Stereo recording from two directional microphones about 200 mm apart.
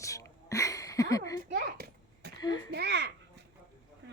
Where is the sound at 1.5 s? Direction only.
60° right (ahead or behind).